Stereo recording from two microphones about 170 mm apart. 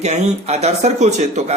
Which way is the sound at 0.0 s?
40° right (ahead or behind).